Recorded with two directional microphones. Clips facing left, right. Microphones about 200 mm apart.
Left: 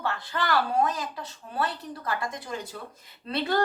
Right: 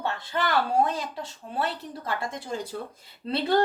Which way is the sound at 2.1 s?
25° right (ahead or behind).